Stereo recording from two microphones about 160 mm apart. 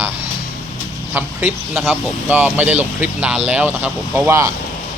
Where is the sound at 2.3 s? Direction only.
10° right (ahead or behind).